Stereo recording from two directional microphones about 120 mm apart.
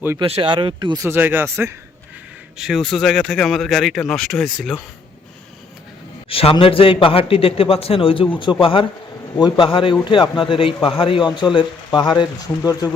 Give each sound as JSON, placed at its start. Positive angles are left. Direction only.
{"t": 0.2, "sound": "speech", "side_deg": -50}
{"t": 0.9, "sound": "speech", "side_deg": -20}
{"t": 2.6, "sound": "speech", "side_deg": 0}
{"t": 6.2, "sound": "a man's voice", "side_deg": 50}